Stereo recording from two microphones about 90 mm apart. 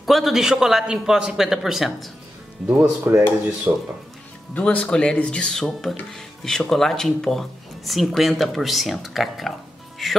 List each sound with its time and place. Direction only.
0.0 s speech: centre (ahead or behind)
2.8 s speech: 30° right (ahead or behind)
4.6 s speech: 15° left (ahead or behind)